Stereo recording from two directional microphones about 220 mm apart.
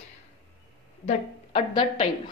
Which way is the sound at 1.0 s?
25° left (ahead or behind).